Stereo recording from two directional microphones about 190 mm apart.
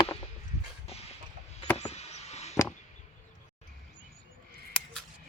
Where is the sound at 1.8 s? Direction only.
35° left (ahead or behind).